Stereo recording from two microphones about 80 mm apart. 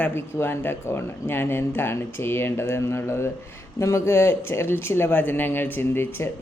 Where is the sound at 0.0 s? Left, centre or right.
Left.